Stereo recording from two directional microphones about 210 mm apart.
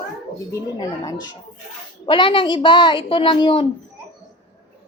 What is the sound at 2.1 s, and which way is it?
A woman's voice, 25° left (ahead or behind).